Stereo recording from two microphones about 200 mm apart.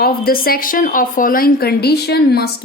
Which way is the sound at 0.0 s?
50° left (ahead or behind).